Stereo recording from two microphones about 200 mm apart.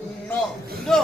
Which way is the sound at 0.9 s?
Centre (ahead or behind).